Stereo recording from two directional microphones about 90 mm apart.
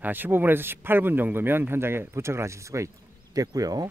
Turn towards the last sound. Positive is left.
turn(degrees=-45)  # may be behind; listen again after turning